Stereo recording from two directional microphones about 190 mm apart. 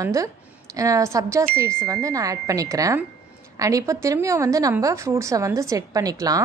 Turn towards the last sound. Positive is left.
turn(degrees=-20)  # may be behind; listen again after turning